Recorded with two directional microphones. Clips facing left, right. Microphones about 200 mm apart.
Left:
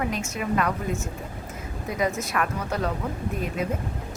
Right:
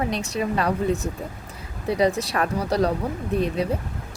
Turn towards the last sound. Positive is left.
turn(degrees=-35)  # may be behind; listen again after turning